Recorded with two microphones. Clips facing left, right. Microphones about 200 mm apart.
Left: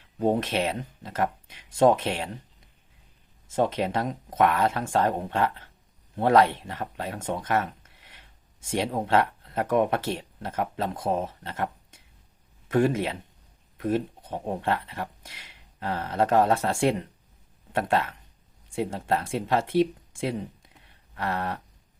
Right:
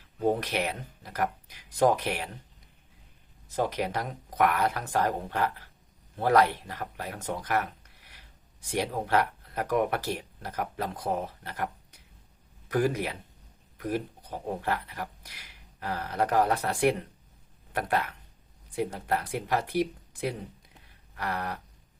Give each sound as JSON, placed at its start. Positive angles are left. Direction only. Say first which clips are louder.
{"t": 0.2, "sound": "speech", "louder": "left 3 dB", "side_deg": 25}
{"t": 3.5, "sound": "speech", "louder": "left 4 dB", "side_deg": 25}